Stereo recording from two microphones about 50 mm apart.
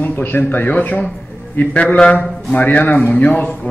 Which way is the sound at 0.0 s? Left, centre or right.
Left.